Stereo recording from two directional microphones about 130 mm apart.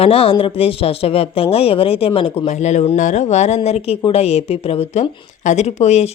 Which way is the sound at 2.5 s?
60° left (ahead or behind).